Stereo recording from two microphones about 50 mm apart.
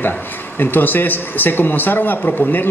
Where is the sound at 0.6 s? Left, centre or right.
Left.